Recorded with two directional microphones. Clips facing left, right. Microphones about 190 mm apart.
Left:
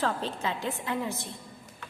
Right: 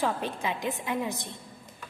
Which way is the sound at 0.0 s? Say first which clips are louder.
Right 1 dB; 15° right (ahead or behind).